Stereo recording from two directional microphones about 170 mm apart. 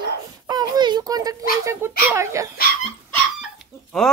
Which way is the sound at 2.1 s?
15° right (ahead or behind).